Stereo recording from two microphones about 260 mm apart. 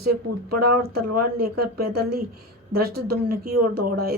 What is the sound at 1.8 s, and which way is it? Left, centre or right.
A woman's voice, right.